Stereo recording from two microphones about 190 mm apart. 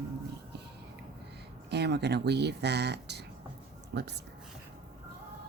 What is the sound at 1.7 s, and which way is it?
Speech, 60° right (ahead or behind).